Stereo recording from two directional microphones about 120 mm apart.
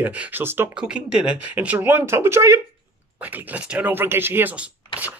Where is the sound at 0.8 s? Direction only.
5° right (ahead or behind).